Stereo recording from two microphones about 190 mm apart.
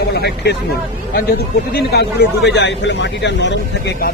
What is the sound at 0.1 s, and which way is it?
Speech, 60° left (ahead or behind).